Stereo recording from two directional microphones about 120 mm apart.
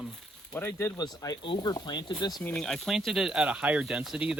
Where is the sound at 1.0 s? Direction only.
30° left (ahead or behind).